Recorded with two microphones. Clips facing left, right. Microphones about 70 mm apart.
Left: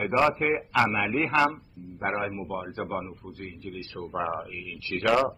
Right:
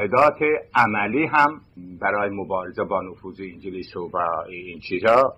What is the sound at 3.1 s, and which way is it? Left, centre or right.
Speech, right.